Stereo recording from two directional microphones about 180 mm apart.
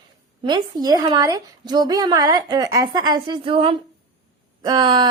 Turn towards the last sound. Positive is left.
turn(degrees=-25)  # may be behind; listen again after turning